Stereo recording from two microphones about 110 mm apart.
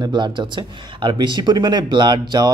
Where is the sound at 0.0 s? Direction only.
45° right (ahead or behind).